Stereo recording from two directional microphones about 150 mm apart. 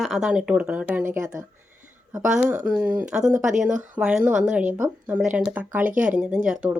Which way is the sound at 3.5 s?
55° right (ahead or behind).